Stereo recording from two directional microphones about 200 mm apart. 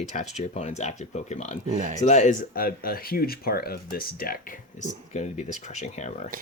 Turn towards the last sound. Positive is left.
turn(degrees=35)  # may be behind; listen again after turning